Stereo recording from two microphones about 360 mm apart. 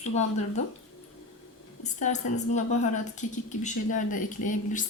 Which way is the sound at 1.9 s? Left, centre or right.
Centre.